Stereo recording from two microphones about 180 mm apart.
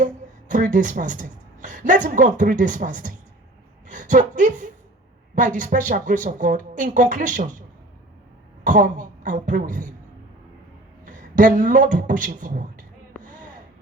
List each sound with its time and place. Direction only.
0.5 s a woman's voice: 45° right (ahead or behind)
8.6 s a woman's voice: 50° right (ahead or behind)
11.0 s a man's voice: 45° right (ahead or behind)